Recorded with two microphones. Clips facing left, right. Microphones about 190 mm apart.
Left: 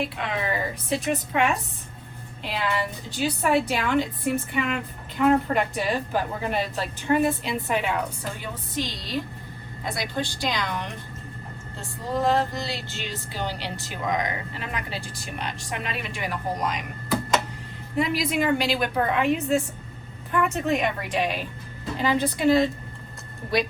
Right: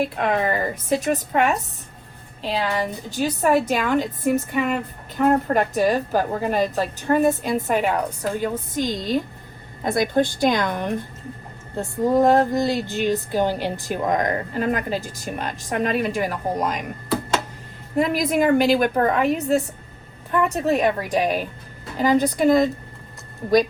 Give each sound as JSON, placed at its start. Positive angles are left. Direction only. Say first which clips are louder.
{"t": 0.0, "sound": "a woman's voice", "louder": "right 7 dB", "side_deg": -50}
{"t": 17.9, "sound": "a woman's voice", "louder": "right 4 dB", "side_deg": -50}